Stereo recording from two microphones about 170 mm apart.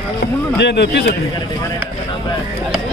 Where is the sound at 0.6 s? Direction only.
85° left.